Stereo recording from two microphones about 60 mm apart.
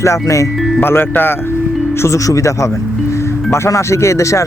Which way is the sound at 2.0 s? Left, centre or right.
Left.